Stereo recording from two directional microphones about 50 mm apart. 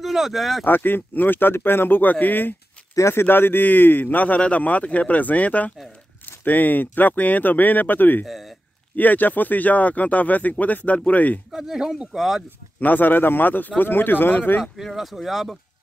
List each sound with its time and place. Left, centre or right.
0.0 s speech: centre
0.7 s speech: left
2.9 s a sound: left
3.2 s a man's voice: left
8.3 s speech: centre
8.9 s a man's voice: left
11.5 s speech: centre
12.8 s a man's voice: left
14.6 s speech: centre